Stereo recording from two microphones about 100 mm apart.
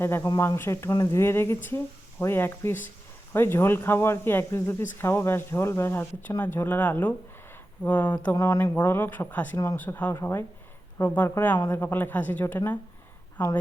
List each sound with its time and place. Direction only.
0.0 s speech: 25° left (ahead or behind)